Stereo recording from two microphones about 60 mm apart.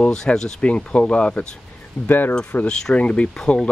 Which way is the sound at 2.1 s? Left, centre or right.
Left.